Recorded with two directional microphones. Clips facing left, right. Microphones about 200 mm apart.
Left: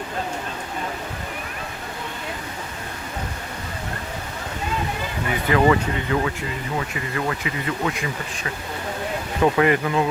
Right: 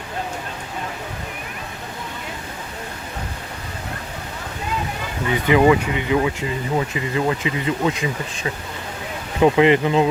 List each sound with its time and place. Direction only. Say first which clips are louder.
5.5 s speech: right 3 dB; 15° right (ahead or behind)
9.4 s speech: right 4 dB; 20° right (ahead or behind)